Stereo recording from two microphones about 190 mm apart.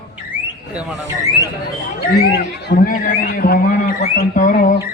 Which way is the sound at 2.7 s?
45° left (ahead or behind).